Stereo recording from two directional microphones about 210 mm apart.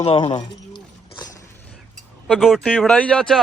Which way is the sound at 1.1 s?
20° left (ahead or behind).